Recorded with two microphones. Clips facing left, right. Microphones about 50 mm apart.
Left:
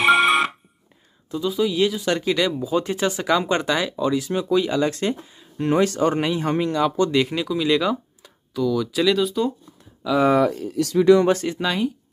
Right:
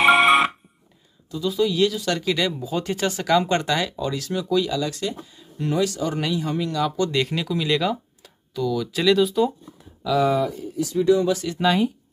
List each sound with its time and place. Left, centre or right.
0.0 s a sound: centre
1.5 s speech: centre; by 6.7 s left
6.7 s speech: left
7.2 s speech: centre
10.1 s speech: left
10.4 s speech: left
11.6 s speech: centre